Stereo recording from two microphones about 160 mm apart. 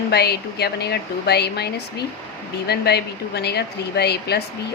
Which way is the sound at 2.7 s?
90° left.